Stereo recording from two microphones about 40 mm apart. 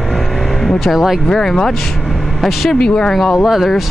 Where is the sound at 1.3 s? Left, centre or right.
Centre.